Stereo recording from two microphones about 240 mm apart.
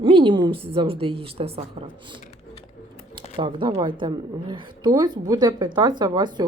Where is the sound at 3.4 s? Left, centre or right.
Right.